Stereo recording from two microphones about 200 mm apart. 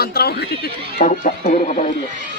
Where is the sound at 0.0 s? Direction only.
50° left (ahead or behind).